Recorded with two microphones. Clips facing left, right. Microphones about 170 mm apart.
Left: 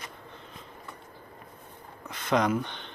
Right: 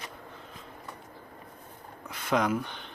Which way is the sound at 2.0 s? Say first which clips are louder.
Left 2 dB; 5° right (ahead or behind).